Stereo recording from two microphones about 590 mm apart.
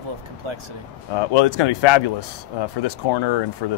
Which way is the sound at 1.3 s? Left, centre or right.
Left.